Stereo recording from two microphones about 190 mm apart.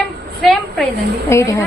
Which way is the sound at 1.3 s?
15° left (ahead or behind).